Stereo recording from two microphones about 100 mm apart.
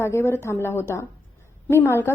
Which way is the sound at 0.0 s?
25° left (ahead or behind).